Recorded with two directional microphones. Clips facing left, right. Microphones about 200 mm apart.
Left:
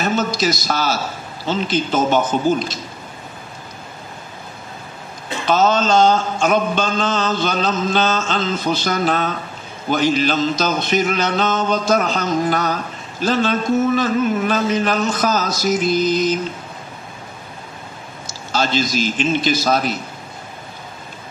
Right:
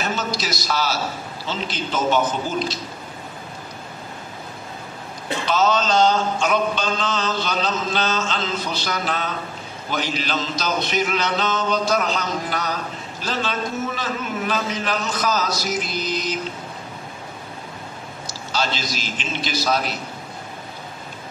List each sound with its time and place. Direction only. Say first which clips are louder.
0.0 s a man's voice: left 7 dB; 50° left (ahead or behind)
1.4 s mantra: left 9 dB; 50° left (ahead or behind)
5.5 s mantra: left 4 dB; 50° left (ahead or behind)
18.5 s mantra: left 6 dB; 50° left (ahead or behind)